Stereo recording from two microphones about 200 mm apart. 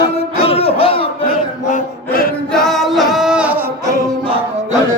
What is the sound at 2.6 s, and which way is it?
Singing, centre (ahead or behind).